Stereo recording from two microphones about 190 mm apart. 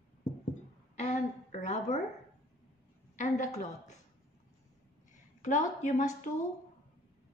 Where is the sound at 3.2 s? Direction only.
40° left (ahead or behind).